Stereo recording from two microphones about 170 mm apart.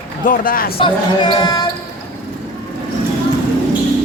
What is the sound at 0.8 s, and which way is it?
Speech, 25° left (ahead or behind).